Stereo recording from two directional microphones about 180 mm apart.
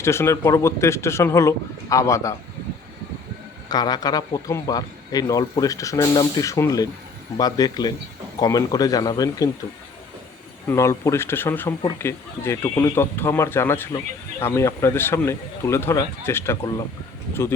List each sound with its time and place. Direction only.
0.0 s speech: 15° left (ahead or behind)
3.7 s a man's voice: 20° left (ahead or behind)
10.7 s speech: 15° left (ahead or behind)